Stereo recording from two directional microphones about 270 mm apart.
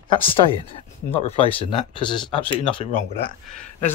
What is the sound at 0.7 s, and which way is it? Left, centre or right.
Speech, left.